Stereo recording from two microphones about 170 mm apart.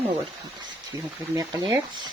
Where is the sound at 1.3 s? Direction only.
25° right (ahead or behind).